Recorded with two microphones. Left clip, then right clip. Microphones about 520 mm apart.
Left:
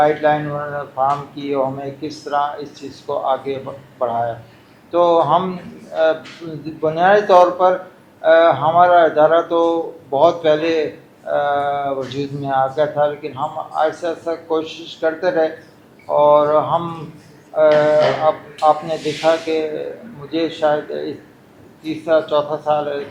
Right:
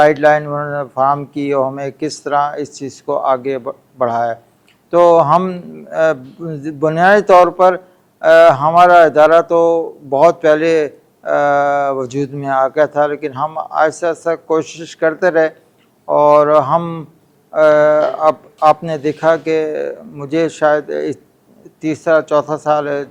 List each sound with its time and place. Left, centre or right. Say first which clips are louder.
0.0 s a man's voice: right 5 dB; right
21.8 s speech: right 4 dB; right